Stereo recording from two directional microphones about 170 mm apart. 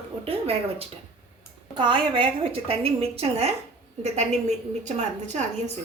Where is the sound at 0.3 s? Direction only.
35° right (ahead or behind).